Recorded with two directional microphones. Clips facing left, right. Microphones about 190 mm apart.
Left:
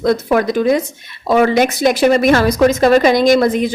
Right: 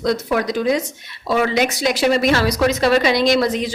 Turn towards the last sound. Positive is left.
turn(degrees=50)  # may be behind; listen again after turning